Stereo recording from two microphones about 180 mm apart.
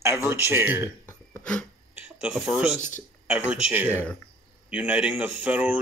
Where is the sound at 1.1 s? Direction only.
10° left (ahead or behind).